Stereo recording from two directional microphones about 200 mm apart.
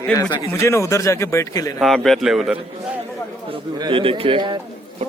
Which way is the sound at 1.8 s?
Centre (ahead or behind).